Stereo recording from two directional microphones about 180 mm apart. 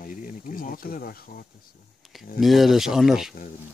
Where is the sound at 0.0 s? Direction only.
50° left (ahead or behind).